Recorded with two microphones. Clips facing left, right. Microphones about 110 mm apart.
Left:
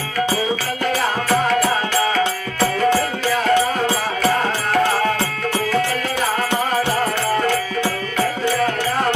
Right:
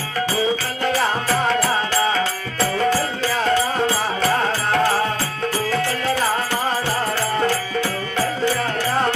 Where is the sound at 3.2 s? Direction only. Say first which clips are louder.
Left 1 dB; 30° right (ahead or behind).